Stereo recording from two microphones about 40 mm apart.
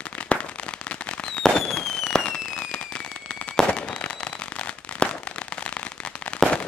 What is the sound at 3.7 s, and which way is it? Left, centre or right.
Firecracker, left.